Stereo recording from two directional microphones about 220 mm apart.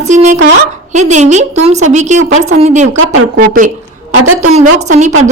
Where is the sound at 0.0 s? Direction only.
30° right (ahead or behind).